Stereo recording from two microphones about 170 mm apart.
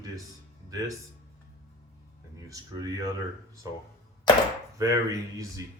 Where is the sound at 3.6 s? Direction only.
20° right (ahead or behind).